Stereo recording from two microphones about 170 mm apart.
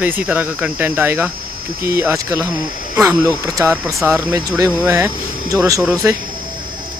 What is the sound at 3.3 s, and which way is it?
Speech, 5° left (ahead or behind).